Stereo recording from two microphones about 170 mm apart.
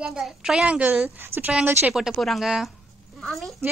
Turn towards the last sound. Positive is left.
turn(degrees=0)  # may be behind; listen again after turning